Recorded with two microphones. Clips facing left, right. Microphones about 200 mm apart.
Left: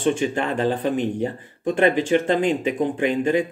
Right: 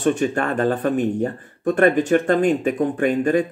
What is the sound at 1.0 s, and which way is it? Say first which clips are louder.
Speech: right 3 dB; 45° right (ahead or behind).